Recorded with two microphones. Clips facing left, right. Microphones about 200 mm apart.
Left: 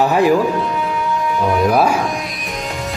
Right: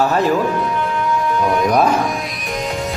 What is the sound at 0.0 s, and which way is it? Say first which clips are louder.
Speech: left 3 dB; 15° left (ahead or behind).